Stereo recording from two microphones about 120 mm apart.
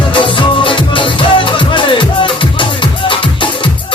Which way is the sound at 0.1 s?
45° left (ahead or behind).